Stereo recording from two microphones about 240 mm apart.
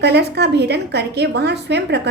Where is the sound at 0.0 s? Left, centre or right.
Right.